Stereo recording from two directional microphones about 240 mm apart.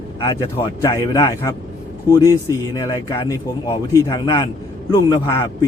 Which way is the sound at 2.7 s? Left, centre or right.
Centre.